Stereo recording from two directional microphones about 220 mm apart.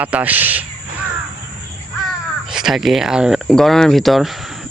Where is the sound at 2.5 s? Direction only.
Centre (ahead or behind).